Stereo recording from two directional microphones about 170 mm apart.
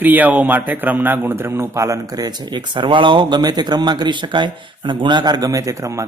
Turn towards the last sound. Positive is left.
turn(degrees=-20)  # may be behind; listen again after turning